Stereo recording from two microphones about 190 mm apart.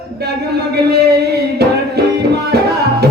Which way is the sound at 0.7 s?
55° right (ahead or behind).